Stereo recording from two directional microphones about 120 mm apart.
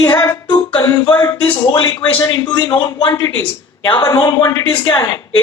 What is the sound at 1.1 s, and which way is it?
A woman's voice, 40° left (ahead or behind).